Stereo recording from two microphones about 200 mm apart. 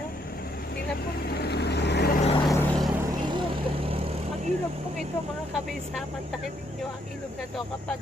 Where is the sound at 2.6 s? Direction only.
Centre (ahead or behind).